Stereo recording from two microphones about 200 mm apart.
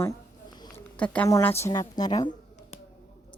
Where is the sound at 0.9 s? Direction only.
5° left (ahead or behind).